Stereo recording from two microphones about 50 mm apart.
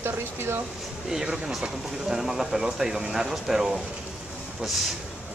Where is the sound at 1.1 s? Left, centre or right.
Centre.